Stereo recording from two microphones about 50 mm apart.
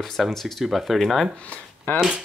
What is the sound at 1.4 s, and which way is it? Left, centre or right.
Speech, left.